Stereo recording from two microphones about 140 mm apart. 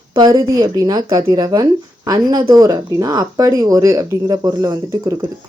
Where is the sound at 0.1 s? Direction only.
30° right (ahead or behind).